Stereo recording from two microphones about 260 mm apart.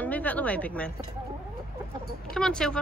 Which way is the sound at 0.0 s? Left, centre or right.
Centre.